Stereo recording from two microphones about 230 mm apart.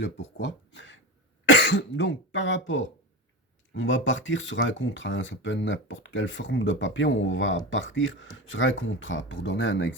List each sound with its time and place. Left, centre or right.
0.0 s speech: left